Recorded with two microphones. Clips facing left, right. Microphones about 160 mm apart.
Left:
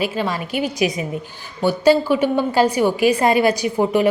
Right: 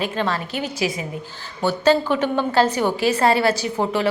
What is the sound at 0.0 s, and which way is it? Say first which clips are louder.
A woman's voice: left 1 dB; 10° left (ahead or behind).